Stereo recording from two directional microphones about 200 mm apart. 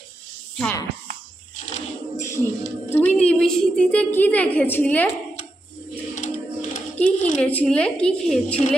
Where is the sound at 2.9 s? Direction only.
10° left (ahead or behind).